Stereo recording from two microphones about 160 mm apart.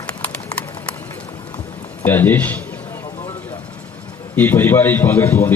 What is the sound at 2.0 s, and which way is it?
Speech, 10° left (ahead or behind).